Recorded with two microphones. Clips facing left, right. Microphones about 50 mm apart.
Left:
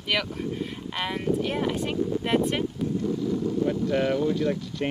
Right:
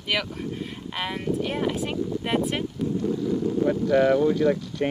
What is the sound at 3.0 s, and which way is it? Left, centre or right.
Wind noise, right.